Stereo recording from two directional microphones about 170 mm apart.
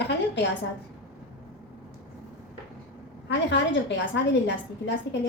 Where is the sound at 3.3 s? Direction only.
90° left.